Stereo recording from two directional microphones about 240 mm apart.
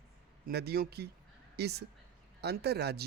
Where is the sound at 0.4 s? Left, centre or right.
Right.